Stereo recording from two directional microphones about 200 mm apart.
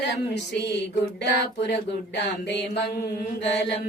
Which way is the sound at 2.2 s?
55° left (ahead or behind).